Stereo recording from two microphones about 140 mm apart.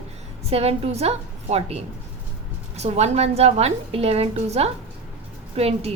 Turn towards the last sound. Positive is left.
turn(degrees=-45)  # may be behind; listen again after turning